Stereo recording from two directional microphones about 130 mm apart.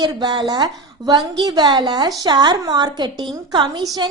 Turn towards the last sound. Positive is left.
turn(degrees=-35)  # may be behind; listen again after turning